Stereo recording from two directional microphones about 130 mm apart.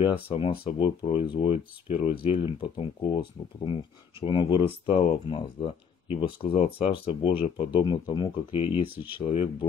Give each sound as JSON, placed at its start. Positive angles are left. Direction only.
{"t": 0.0, "sound": "speech", "side_deg": 45}
{"t": 7.7, "sound": "speech", "side_deg": 35}
{"t": 8.9, "sound": "speech", "side_deg": -15}
{"t": 9.2, "sound": "speech", "side_deg": 50}